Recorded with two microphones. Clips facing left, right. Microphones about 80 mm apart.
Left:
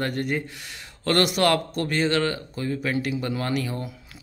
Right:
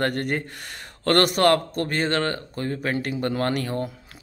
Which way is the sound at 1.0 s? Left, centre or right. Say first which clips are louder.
Right 3 dB; right.